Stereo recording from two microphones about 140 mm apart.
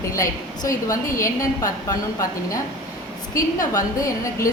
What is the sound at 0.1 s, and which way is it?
A woman's voice, 25° left (ahead or behind).